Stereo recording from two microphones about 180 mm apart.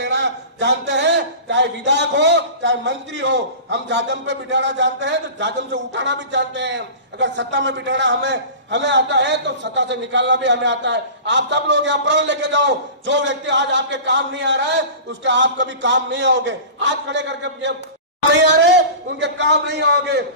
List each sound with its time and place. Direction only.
0.0 s a man's voice: 75° right (ahead or behind)
18.4 s a man's voice: 70° right (ahead or behind)
19.2 s a man's voice: 85° right; by 20.2 s 65° right (ahead or behind)